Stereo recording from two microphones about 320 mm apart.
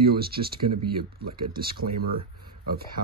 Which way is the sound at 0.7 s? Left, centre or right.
Right.